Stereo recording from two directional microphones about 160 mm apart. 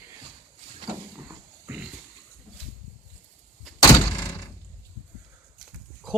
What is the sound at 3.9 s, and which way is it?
Thunk, 20° left (ahead or behind).